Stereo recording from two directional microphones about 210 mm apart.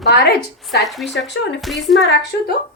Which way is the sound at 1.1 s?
55° left (ahead or behind).